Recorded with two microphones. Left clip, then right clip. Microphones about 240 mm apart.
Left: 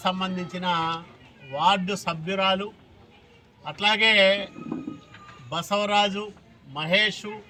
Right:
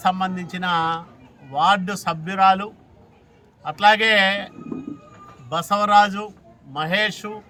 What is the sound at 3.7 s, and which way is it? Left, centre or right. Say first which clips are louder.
Speech: right 8 dB; right.